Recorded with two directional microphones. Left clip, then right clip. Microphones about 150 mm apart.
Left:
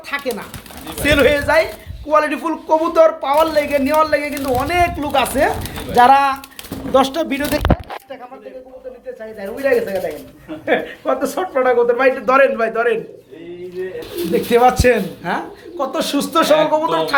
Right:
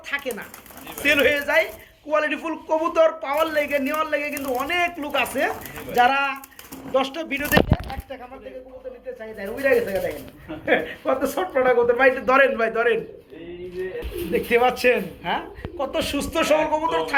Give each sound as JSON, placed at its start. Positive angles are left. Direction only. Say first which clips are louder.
{"t": 0.1, "sound": "speech", "louder": "left 5 dB", "side_deg": 15}
{"t": 6.9, "sound": "speech", "louder": "left 8 dB", "side_deg": 40}
{"t": 9.4, "sound": "speech", "louder": "left 3 dB", "side_deg": 0}
{"t": 11.9, "sound": "speech", "louder": "left 4 dB", "side_deg": 10}
{"t": 14.3, "sound": "speech", "louder": "left 6 dB", "side_deg": 10}